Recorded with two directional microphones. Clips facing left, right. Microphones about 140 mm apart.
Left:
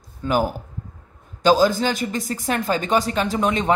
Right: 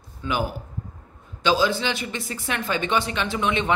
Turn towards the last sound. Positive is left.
turn(degrees=40)  # may be behind; listen again after turning